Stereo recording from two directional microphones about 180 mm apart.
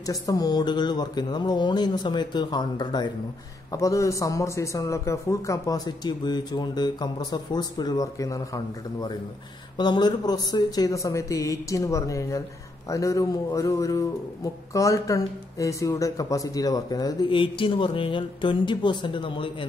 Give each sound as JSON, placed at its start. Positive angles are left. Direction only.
{"t": 0.0, "sound": "a woman's voice", "side_deg": 20}
{"t": 9.8, "sound": "a woman's voice", "side_deg": 25}